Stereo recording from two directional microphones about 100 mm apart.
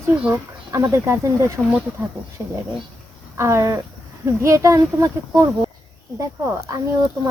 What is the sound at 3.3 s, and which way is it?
Speech, 30° right (ahead or behind).